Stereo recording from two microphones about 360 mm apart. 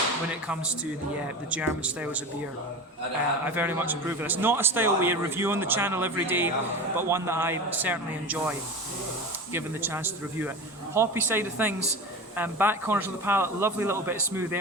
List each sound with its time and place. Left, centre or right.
1.5 s a man's voice: centre
3.4 s a man's voice: centre